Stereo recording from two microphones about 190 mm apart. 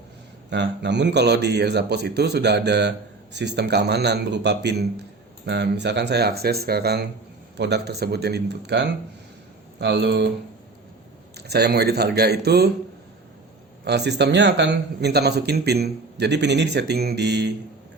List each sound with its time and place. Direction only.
0.5 s speech: 70° right (ahead or behind)
11.3 s speech: 60° right (ahead or behind)
13.8 s speech: 60° right (ahead or behind)